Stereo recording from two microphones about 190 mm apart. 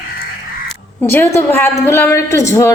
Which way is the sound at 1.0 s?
10° left (ahead or behind).